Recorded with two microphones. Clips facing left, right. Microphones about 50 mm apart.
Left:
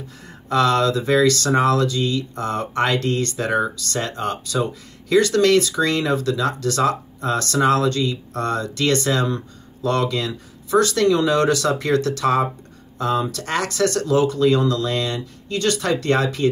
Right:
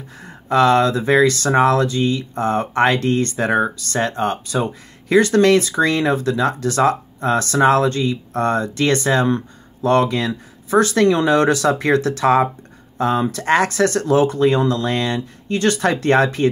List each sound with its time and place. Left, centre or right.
0.5 s speech: right